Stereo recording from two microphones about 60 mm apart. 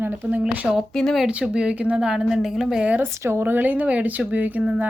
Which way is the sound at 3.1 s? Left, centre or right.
Right.